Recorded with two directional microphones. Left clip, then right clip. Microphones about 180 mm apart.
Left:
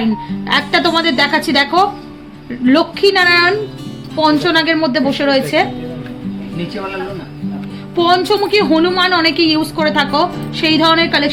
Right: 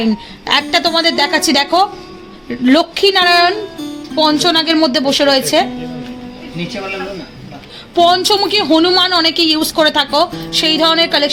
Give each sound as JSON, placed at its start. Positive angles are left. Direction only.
{"t": 0.4, "sound": "a woman's voice", "side_deg": -55}
{"t": 7.9, "sound": "a woman's voice", "side_deg": -45}